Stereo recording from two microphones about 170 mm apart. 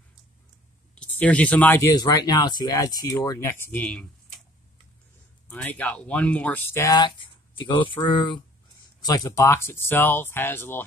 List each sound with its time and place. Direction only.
0.9 s speech: 10° left (ahead or behind)
5.5 s speech: 10° left (ahead or behind)